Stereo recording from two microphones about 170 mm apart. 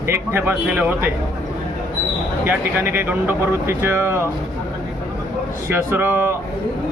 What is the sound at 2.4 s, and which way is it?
Speech, 15° right (ahead or behind).